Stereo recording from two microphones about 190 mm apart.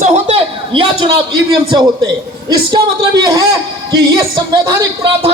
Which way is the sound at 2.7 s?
20° right (ahead or behind).